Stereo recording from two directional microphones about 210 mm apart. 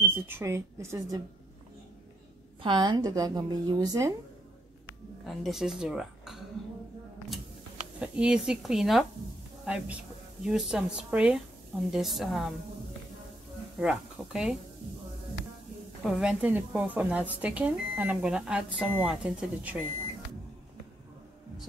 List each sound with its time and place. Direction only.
0.0 s speech: 10° right (ahead or behind)
2.6 s speech: 20° right (ahead or behind)
5.2 s speech: centre (ahead or behind)
8.0 s a woman's voice: 5° right (ahead or behind)
13.7 s a woman's voice: 5° right (ahead or behind)
16.0 s a woman's voice: centre (ahead or behind)